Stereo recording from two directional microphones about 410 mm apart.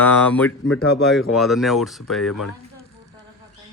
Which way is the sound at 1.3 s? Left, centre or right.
Centre.